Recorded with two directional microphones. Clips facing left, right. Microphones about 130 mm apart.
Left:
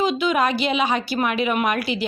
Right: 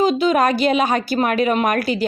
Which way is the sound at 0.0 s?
40° right (ahead or behind).